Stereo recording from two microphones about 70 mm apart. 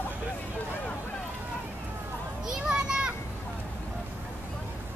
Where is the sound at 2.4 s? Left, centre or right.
Centre.